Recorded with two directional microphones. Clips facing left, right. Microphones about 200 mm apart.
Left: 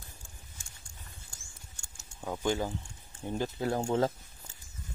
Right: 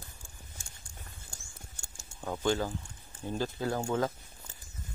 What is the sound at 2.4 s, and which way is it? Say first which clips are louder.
Speech: right 1 dB; 15° left (ahead or behind).